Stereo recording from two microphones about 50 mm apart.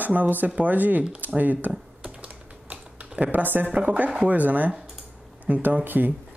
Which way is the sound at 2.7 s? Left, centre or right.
Right.